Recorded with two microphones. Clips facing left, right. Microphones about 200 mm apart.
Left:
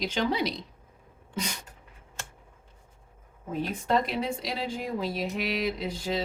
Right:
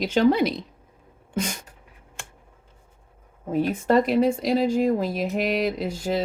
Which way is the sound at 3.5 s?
50° right (ahead or behind).